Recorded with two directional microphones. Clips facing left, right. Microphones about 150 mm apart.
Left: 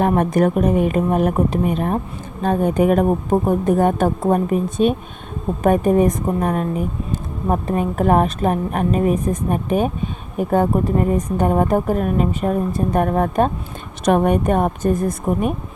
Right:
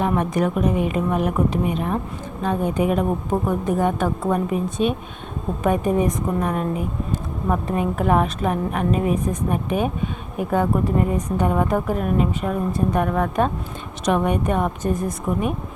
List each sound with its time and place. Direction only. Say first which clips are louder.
0.2 s a woman's voice: left 4 dB; 50° left (ahead or behind)